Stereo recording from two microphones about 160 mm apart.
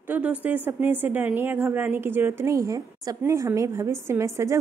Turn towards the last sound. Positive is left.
turn(degrees=-20)  # may be behind; listen again after turning